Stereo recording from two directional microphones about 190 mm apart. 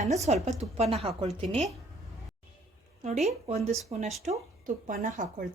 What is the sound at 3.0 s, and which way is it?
Speech, 35° right (ahead or behind).